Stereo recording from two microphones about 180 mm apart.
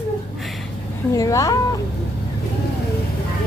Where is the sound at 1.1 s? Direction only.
20° left (ahead or behind).